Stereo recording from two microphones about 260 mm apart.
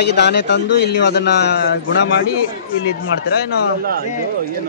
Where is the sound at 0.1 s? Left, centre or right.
Left.